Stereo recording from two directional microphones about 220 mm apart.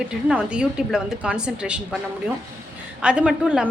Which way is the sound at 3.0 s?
5° right (ahead or behind).